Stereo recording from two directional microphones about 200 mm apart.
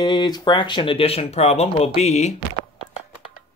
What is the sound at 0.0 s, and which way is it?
Speech, 20° left (ahead or behind).